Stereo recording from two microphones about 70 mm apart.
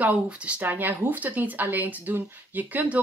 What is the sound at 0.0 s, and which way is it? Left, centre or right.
Speech, centre.